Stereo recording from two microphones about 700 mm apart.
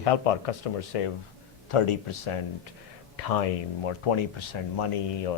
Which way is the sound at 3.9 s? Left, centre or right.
Left.